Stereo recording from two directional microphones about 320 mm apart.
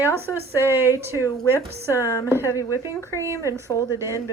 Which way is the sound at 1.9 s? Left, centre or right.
Centre.